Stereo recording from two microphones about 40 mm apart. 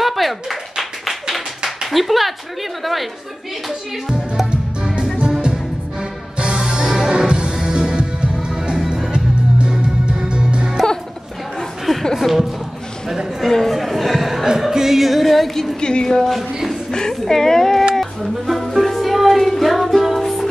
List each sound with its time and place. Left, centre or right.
0.0 s clapping: centre
1.9 s music: centre
4.9 s music: right
9.1 s music: right
11.8 s a sound: centre
13.4 s music: centre
13.7 s a sound: centre
14.6 s music: centre
15.8 s a woman's voice: left
16.2 s music: centre
17.1 s speech: centre
18.5 s music: centre